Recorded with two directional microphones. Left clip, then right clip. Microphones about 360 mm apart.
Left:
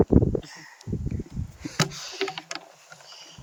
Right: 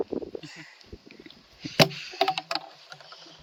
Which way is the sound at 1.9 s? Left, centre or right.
Centre.